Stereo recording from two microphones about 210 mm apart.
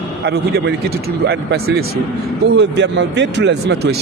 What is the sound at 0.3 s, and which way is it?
Speech, 55° right (ahead or behind).